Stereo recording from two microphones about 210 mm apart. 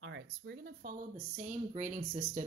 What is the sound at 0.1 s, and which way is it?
Speech, 55° right (ahead or behind).